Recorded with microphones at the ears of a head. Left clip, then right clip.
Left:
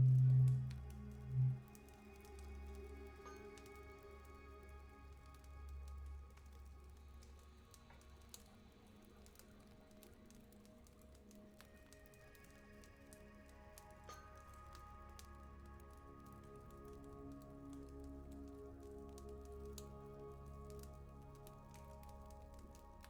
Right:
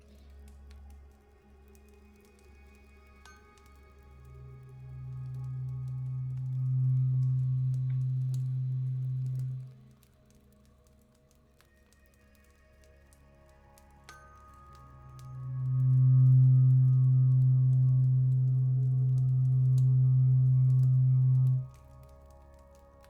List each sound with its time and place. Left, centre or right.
0.0 s music: left
4.9 s music: right
14.1 s music: right